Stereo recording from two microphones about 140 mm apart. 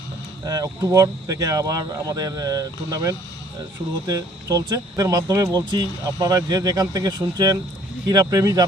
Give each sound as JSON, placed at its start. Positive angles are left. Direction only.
{"t": 0.4, "sound": "speech", "side_deg": -25}